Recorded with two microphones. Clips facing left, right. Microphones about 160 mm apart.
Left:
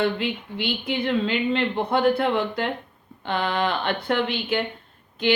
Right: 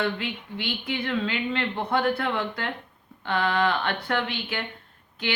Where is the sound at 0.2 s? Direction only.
20° left (ahead or behind).